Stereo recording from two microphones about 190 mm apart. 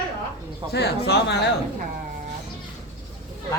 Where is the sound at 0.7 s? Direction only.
60° left (ahead or behind).